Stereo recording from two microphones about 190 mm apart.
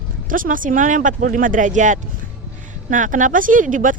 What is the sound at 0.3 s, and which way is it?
A woman's voice, 45° right (ahead or behind).